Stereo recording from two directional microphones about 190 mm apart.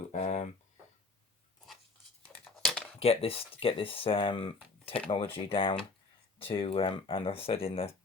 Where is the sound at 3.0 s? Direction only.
30° left (ahead or behind).